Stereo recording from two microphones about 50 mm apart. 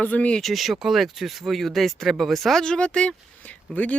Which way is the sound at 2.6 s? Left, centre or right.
Centre.